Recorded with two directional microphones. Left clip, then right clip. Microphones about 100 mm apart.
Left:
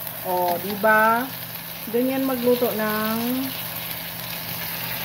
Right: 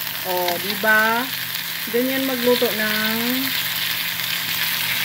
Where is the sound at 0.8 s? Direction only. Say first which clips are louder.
Even; 35° right (ahead or behind).